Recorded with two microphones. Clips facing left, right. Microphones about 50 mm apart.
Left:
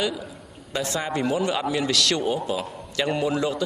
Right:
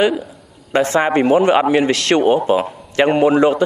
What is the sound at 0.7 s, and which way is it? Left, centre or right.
A man's voice, right.